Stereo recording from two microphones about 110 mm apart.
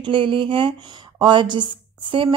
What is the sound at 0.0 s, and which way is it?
A woman's voice, 50° right (ahead or behind).